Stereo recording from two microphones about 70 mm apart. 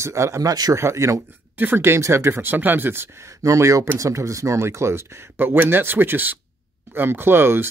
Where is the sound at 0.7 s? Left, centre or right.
Right.